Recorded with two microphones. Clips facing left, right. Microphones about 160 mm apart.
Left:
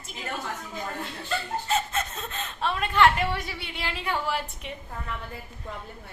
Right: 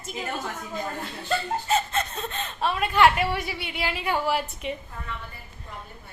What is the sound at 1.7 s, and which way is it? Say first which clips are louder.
Speech: right 2 dB; centre (ahead or behind).